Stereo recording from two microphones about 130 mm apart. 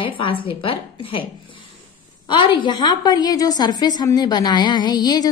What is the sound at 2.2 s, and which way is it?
A woman's voice, 35° left (ahead or behind).